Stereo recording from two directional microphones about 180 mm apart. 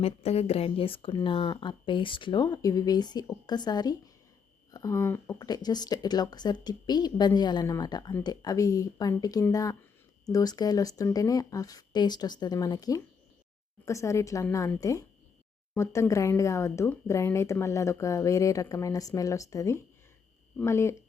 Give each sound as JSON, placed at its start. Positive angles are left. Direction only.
{"t": 0.0, "sound": "speech", "side_deg": 35}